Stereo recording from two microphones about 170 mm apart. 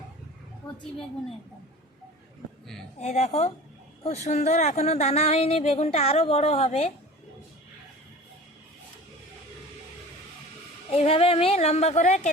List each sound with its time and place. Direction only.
0.6 s a sound: 20° left (ahead or behind)
3.0 s a woman's voice: 40° left (ahead or behind)
10.9 s a woman's voice: 35° left (ahead or behind)